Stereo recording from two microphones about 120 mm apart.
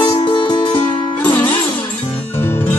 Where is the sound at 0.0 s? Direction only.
40° left (ahead or behind).